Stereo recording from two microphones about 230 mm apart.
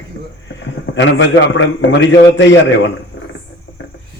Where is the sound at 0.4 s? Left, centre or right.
Left.